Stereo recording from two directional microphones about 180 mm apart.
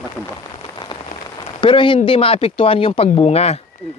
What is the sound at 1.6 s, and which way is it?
Speech, 30° left (ahead or behind).